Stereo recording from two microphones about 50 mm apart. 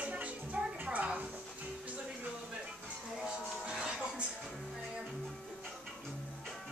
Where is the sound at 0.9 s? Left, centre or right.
Right.